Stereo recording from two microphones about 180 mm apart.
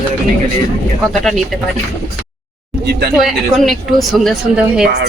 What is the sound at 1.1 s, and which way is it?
Speech, centre (ahead or behind).